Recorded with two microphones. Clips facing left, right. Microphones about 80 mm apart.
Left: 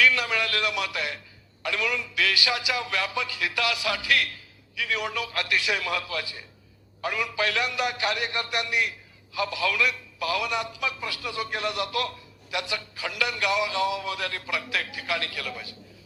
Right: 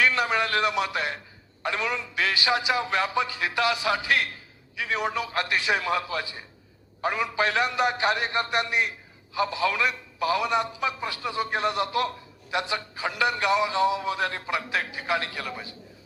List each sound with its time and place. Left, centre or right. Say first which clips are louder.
0.0 s a man's voice: right 1 dB; right